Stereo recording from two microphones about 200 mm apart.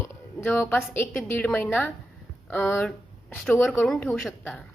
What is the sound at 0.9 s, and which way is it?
Speech, 10° left (ahead or behind).